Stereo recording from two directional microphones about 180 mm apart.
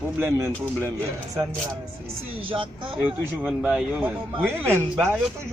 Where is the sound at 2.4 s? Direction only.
30° right (ahead or behind).